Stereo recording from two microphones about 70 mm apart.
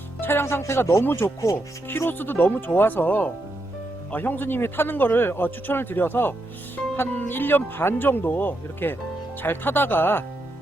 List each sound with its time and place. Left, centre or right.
0.2 s speech: left
1.0 s speech: left